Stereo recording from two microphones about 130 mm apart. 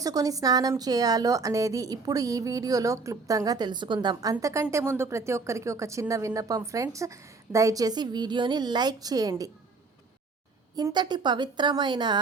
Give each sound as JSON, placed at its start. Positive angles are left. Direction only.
{"t": 0.0, "sound": "a woman's voice", "side_deg": -30}
{"t": 10.8, "sound": "a woman's voice", "side_deg": -30}